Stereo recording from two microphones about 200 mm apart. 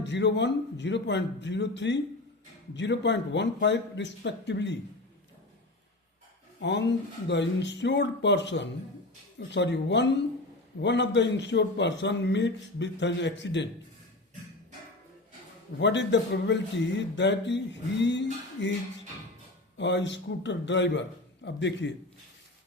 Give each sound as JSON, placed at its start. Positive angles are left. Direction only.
{"t": 0.0, "sound": "speech", "side_deg": 60}
{"t": 6.6, "sound": "speech", "side_deg": 60}
{"t": 15.8, "sound": "speech", "side_deg": 60}